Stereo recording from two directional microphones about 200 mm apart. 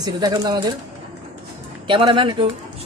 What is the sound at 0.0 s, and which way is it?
Speech, 20° right (ahead or behind).